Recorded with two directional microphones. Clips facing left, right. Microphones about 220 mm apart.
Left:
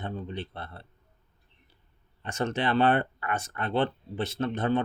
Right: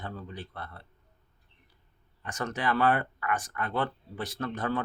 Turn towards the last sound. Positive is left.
turn(degrees=25)  # may be behind; listen again after turning